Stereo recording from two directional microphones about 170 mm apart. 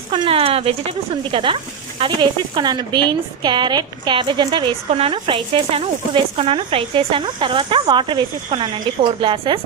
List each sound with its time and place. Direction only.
0.1 s speech: 30° right (ahead or behind)